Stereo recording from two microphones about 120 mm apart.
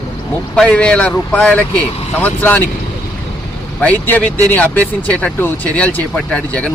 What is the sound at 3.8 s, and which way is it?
Speech, 15° left (ahead or behind).